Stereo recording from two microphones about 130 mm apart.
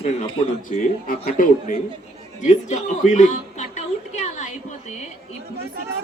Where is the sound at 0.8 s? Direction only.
85° left.